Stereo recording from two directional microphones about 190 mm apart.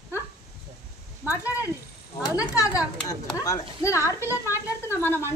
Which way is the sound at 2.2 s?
15° left (ahead or behind).